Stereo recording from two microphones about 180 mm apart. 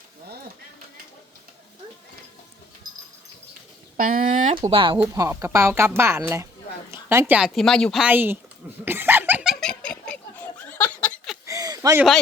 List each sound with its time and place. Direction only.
3.9 s a sound: 50° right (ahead or behind)
4.5 s speech: 30° right (ahead or behind)
4.9 s a woman's voice: 15° right (ahead or behind); by 8.0 s 5° left (ahead or behind)
8.0 s a woman's voice: 10° right (ahead or behind)
8.8 s laughter: 10° right (ahead or behind); by 11.3 s 5° left (ahead or behind)
11.4 s a sound: 20° right (ahead or behind)